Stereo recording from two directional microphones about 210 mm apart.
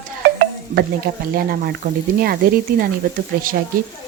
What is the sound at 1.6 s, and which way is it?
Speech, 45° right (ahead or behind).